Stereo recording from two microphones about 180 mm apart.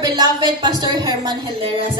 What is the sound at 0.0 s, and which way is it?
Speech, 25° right (ahead or behind).